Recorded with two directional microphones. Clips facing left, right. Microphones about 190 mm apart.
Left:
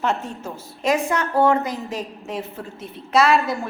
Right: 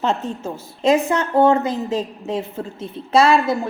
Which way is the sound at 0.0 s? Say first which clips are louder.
Right 3 dB; 25° right (ahead or behind).